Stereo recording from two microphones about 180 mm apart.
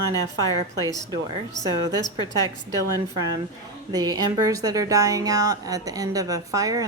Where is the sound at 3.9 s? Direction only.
20° right (ahead or behind).